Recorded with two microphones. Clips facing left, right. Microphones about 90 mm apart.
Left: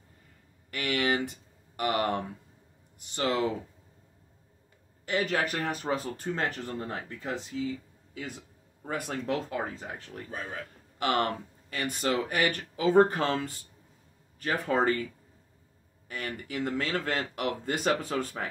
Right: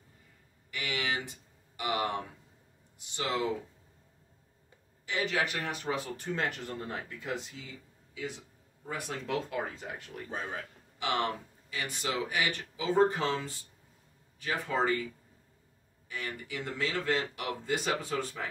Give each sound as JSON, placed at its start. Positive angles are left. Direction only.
{"t": 0.7, "sound": "speech", "side_deg": 50}
{"t": 5.0, "sound": "a man's voice", "side_deg": 45}
{"t": 11.0, "sound": "speech", "side_deg": 50}
{"t": 16.1, "sound": "speech", "side_deg": 50}